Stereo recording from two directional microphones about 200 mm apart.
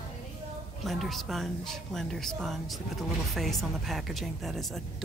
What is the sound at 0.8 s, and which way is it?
A woman's voice, centre (ahead or behind).